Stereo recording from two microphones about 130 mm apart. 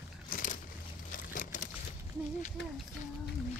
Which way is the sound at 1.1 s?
90° left.